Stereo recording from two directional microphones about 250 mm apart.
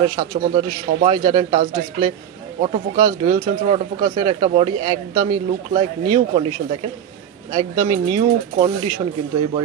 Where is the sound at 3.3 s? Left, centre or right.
Right.